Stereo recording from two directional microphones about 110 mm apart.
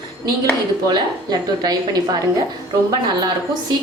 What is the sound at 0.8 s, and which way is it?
A woman's voice, 35° right (ahead or behind).